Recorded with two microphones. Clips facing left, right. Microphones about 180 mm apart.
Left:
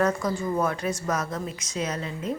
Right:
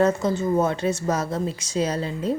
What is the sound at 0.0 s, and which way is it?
Speech, 25° right (ahead or behind).